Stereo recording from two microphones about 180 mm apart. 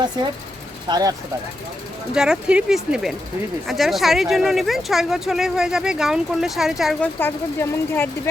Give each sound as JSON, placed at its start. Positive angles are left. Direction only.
{"t": 0.9, "sound": "speech", "side_deg": -20}
{"t": 2.1, "sound": "speech", "side_deg": -5}
{"t": 7.2, "sound": "speech", "side_deg": 10}